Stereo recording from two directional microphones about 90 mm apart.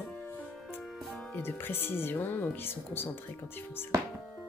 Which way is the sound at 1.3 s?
20° left (ahead or behind).